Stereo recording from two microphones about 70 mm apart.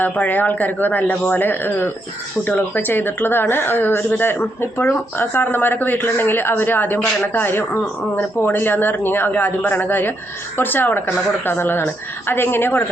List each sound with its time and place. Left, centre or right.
0.0 s speech: left